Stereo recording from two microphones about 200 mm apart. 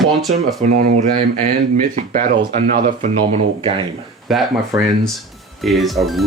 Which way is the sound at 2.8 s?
40° right (ahead or behind).